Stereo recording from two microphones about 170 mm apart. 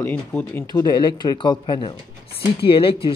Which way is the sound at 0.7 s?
25° left (ahead or behind).